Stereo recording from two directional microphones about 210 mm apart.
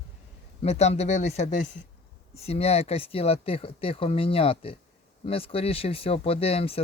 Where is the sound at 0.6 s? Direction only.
30° left (ahead or behind).